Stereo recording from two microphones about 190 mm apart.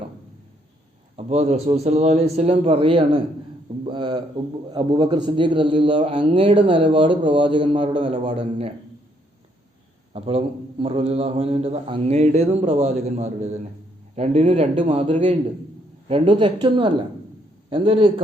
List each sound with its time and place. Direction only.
1.1 s a man's voice: 35° right (ahead or behind)
10.1 s a man's voice: 30° right (ahead or behind)